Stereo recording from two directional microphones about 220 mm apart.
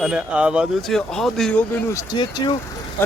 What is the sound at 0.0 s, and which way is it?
Speech, 5° right (ahead or behind).